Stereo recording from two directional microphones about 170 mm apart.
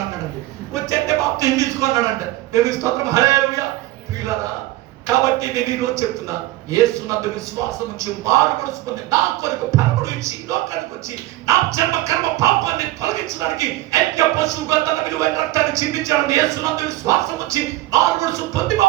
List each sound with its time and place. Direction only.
0.9 s a sound: 20° right (ahead or behind)
2.5 s speech: 20° right (ahead or behind)
5.2 s speech: 20° right (ahead or behind)
7.9 s speech: 20° right (ahead or behind)
11.4 s speech: 20° right (ahead or behind)